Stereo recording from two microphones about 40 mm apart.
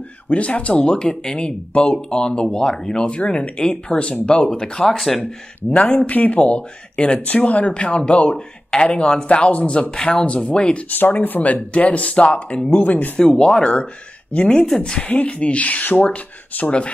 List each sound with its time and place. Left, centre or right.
0.3 s speech: left
0.9 s speech: left
4.9 s speech: centre
5.7 s speech: left
10.9 s speech: left
12.7 s speech: left
13.2 s speech: centre
14.3 s speech: left
14.8 s speech: left
15.1 s speech: left